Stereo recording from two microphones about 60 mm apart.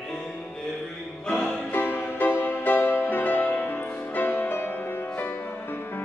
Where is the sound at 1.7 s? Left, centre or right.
Left.